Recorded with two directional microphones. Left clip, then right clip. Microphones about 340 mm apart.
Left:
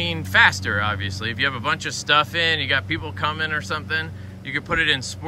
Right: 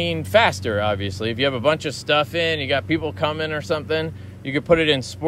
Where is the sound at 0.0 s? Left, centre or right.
Centre.